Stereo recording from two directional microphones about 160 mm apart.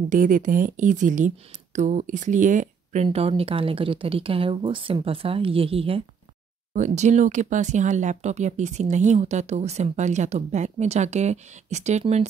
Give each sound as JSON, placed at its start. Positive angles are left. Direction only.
{"t": 0.1, "sound": "speech", "side_deg": -55}
{"t": 6.7, "sound": "speech", "side_deg": -50}